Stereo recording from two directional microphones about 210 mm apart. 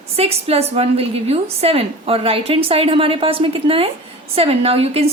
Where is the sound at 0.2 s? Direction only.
30° right (ahead or behind).